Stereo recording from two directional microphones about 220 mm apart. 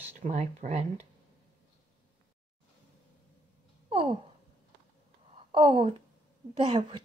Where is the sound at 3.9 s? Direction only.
25° right (ahead or behind).